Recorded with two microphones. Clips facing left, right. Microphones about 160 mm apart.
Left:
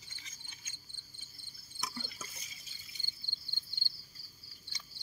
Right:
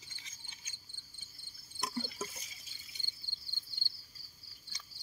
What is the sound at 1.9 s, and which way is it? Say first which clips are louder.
Insect: right 7 dB; 40° right (ahead or behind).